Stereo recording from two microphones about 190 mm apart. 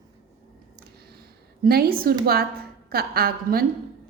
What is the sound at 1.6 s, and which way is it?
A woman's voice, 55° right (ahead or behind).